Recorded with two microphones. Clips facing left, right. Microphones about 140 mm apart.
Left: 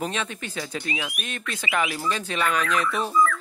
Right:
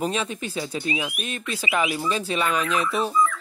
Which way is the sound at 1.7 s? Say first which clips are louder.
Right 2 dB; 25° right (ahead or behind).